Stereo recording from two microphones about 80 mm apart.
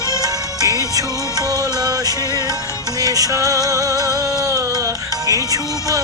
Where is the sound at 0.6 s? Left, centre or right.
Right.